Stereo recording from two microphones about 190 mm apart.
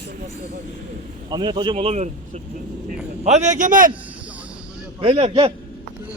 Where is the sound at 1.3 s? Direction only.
25° right (ahead or behind); by 3.9 s 45° right (ahead or behind).